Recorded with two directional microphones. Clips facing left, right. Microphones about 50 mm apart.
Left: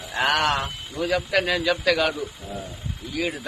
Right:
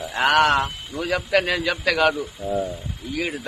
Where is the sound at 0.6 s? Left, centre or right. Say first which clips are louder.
Right 2 dB; centre.